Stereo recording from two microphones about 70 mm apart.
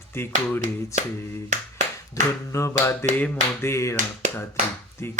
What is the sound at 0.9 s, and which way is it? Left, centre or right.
Speech, left.